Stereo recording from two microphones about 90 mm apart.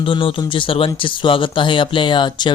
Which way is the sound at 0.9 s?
70° left (ahead or behind).